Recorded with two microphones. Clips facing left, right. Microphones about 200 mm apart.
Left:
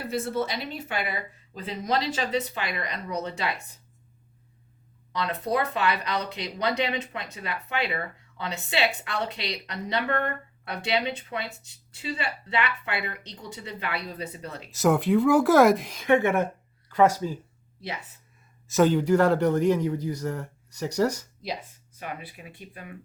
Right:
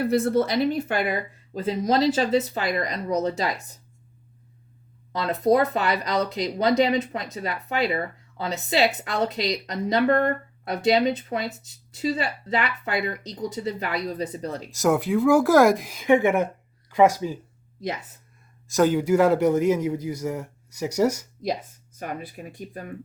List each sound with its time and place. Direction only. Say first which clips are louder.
0.0 s a woman's voice: right 7 dB; 60° right (ahead or behind); by 3.8 s 35° right (ahead or behind)
5.2 s a woman's voice: right 7 dB; 40° right (ahead or behind)
14.7 s a man's voice: even; centre (ahead or behind)
18.7 s a man's voice: right 1 dB; 5° right (ahead or behind)
21.9 s speech: right 5 dB; 45° right (ahead or behind)